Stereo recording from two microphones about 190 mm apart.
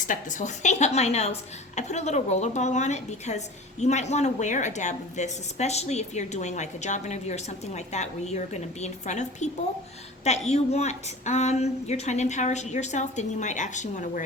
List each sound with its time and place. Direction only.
0.0 s a woman's voice: 40° left (ahead or behind)